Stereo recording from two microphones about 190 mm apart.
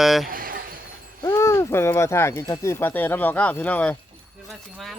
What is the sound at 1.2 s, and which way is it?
Speech, 15° left (ahead or behind).